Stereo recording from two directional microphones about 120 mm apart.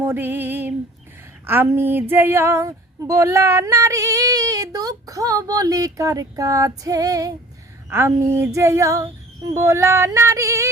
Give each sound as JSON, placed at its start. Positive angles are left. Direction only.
{"t": 0.0, "sound": "music", "side_deg": -20}
{"t": 1.5, "sound": "female singing", "side_deg": -20}